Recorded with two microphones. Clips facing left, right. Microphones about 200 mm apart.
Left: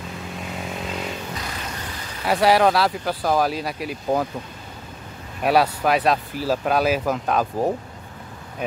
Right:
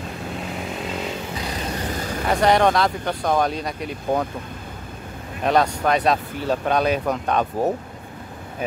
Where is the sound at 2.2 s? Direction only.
5° left (ahead or behind).